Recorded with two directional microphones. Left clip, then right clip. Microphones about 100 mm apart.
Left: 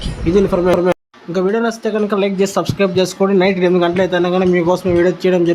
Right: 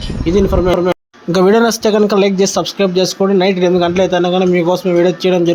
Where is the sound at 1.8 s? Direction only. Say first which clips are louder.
Right 6 dB; 90° right.